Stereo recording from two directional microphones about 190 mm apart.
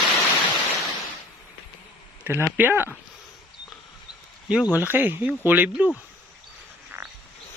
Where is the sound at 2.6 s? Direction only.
10° right (ahead or behind).